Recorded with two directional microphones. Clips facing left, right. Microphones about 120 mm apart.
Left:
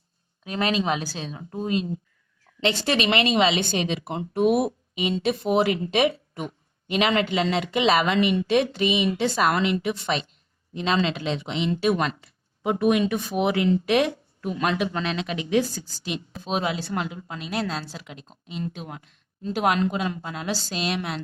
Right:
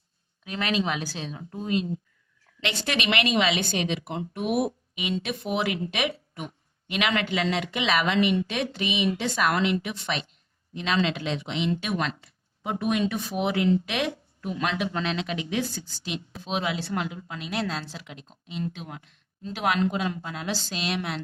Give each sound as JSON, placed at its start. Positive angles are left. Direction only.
{"t": 0.4, "sound": "a woman's voice", "side_deg": 35}
{"t": 12.8, "sound": "speech", "side_deg": 55}
{"t": 13.8, "sound": "a woman's voice", "side_deg": 45}